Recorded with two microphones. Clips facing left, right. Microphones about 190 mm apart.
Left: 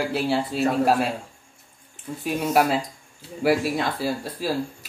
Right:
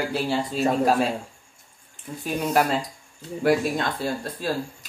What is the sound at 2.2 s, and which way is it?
Speech, 5° left (ahead or behind).